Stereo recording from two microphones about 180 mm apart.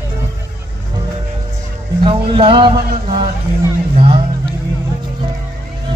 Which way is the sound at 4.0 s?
30° right (ahead or behind).